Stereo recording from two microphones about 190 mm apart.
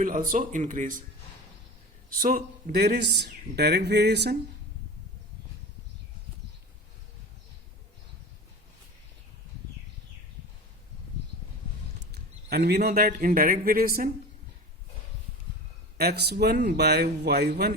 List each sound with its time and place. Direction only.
0.0 s speech: 45° right (ahead or behind)
2.0 s speech: 45° right (ahead or behind)
11.9 s speech: 60° right (ahead or behind)
16.0 s speech: 60° right (ahead or behind)